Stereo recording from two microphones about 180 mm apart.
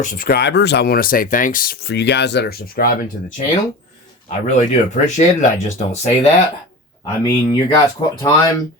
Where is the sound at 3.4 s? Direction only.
40° left (ahead or behind).